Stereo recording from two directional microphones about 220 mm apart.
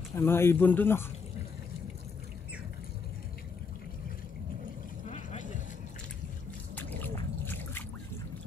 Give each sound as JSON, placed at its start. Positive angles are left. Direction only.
{"t": 0.1, "sound": "speech", "side_deg": 10}
{"t": 5.1, "sound": "vehicle", "side_deg": 35}
{"t": 6.7, "sound": "a sound", "side_deg": 10}